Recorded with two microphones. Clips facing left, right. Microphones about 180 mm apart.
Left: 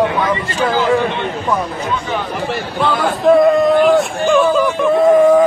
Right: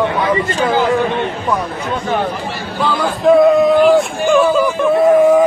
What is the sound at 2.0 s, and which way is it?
Speech, 50° right (ahead or behind).